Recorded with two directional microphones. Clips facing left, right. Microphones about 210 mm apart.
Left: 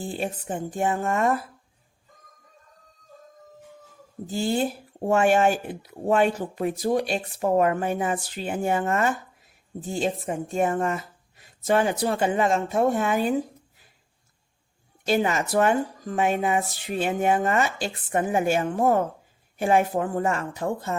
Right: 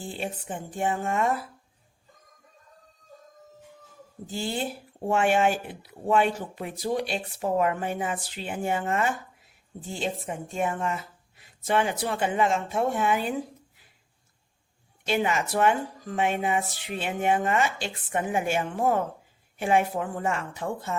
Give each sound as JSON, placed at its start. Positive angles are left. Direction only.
{"t": 0.2, "sound": "speech", "side_deg": 40}
{"t": 4.3, "sound": "speech", "side_deg": 45}
{"t": 15.0, "sound": "speech", "side_deg": 40}